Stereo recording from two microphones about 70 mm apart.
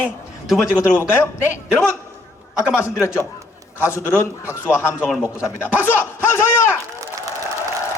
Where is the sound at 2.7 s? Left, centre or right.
Left.